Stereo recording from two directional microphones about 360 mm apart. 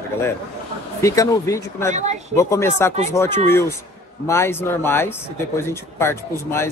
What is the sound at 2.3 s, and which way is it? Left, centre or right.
Speech, centre.